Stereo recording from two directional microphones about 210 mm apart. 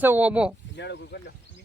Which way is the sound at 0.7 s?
55° left (ahead or behind).